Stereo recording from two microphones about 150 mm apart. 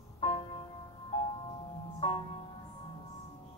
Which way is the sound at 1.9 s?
40° left (ahead or behind).